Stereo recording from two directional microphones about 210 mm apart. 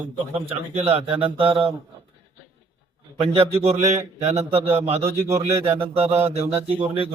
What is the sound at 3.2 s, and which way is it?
Speech, 30° right (ahead or behind).